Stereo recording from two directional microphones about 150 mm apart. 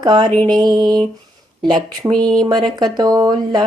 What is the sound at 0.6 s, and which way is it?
Speech, 30° right (ahead or behind).